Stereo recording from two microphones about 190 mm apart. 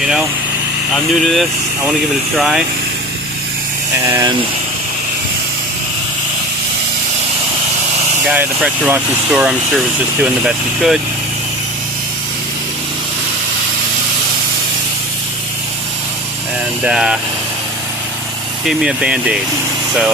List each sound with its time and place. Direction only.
0.0 s speech: 5° right (ahead or behind)
4.0 s speech: 15° right (ahead or behind)
8.2 s speech: 5° right (ahead or behind)
16.8 s speech: 5° right (ahead or behind)
18.6 s speech: centre (ahead or behind)